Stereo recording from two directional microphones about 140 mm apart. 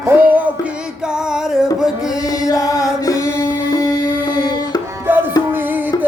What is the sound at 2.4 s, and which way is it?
Chant, 25° left (ahead or behind).